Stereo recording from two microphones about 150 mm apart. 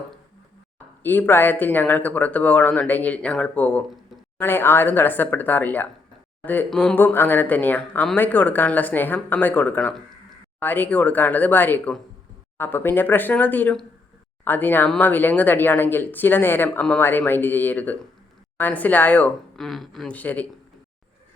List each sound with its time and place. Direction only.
1.0 s speech: 15° left (ahead or behind)